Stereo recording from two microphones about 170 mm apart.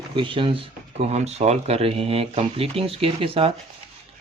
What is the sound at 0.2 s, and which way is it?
Speech, 30° right (ahead or behind).